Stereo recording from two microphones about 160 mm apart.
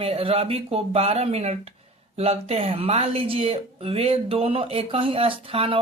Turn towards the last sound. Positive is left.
turn(degrees=-35)  # may be behind; listen again after turning